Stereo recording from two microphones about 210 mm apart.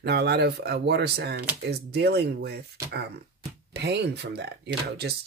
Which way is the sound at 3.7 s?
55° right (ahead or behind).